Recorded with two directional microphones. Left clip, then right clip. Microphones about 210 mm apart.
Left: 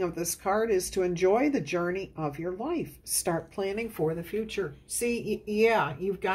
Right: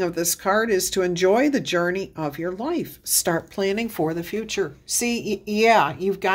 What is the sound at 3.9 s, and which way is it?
Speech, 50° right (ahead or behind).